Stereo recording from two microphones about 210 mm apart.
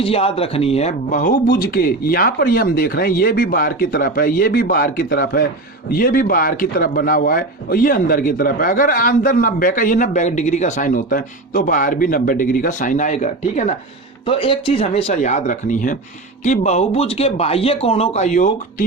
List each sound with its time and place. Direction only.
0.0 s a man's voice: 25° left (ahead or behind)